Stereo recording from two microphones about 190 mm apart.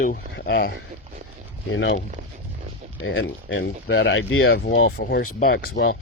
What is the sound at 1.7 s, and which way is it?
Speech, 70° left (ahead or behind).